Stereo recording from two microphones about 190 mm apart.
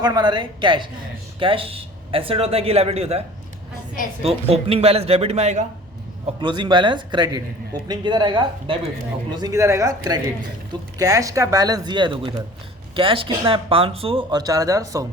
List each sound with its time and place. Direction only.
0.0 s speech: 20° right (ahead or behind)
6.4 s speech: 25° right (ahead or behind)